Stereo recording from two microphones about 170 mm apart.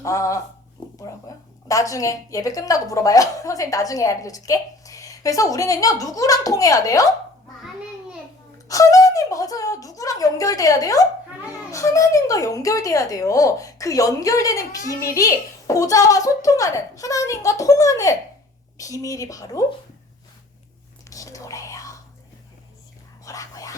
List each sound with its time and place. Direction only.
0.0 s a woman's voice: 20° left (ahead or behind)
8.6 s a woman's voice: 20° left (ahead or behind)
21.1 s whispering: 20° left (ahead or behind)
23.2 s whispering: 20° left (ahead or behind)